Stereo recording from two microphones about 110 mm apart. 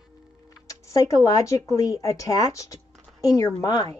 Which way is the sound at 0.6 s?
30° left (ahead or behind).